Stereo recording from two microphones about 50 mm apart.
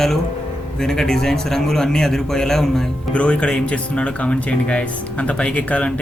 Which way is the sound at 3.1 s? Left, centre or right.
Left.